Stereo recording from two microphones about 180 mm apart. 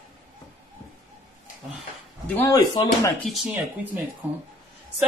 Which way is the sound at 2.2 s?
10° left (ahead or behind).